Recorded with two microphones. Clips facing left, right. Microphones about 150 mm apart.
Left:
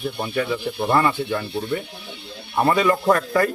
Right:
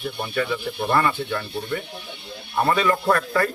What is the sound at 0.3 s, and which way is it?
Speech, 15° left (ahead or behind).